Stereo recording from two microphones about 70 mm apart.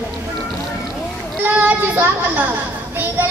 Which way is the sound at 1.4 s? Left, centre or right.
Right.